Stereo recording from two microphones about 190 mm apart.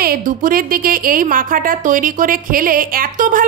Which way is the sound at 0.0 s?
50° right (ahead or behind).